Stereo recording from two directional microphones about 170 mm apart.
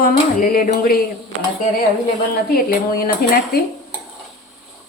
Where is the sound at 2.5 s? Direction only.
60° left (ahead or behind).